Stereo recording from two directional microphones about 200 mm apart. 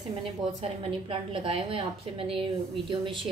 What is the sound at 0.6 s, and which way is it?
A woman's voice, 25° right (ahead or behind).